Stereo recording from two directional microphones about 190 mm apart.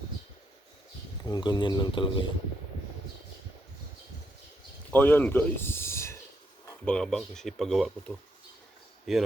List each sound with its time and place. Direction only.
1.2 s a man's voice: 20° left (ahead or behind)
4.9 s speech: 10° left (ahead or behind)